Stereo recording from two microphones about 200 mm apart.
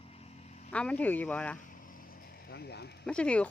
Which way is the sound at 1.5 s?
40° left (ahead or behind).